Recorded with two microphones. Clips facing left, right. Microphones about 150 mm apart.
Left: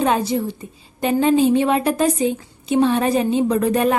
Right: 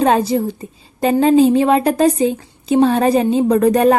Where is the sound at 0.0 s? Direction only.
35° right (ahead or behind).